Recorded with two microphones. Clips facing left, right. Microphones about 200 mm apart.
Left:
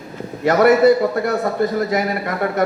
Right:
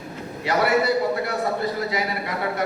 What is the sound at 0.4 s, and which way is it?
A man's voice, 50° left (ahead or behind).